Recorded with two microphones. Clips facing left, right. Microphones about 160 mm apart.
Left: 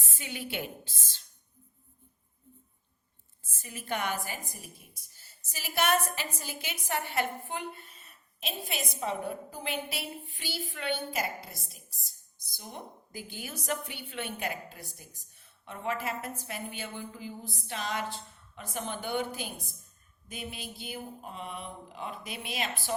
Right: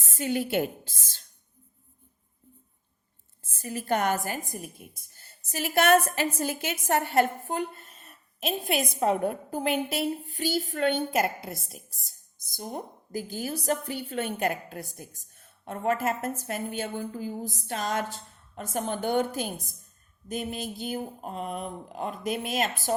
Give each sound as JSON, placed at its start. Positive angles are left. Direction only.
{"t": 0.2, "sound": "a woman's voice", "side_deg": -40}
{"t": 3.6, "sound": "a woman's voice", "side_deg": -40}